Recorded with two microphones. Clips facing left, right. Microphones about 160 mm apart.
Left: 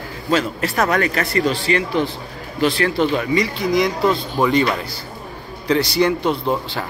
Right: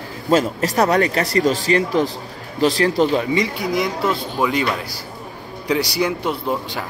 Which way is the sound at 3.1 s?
20° right (ahead or behind).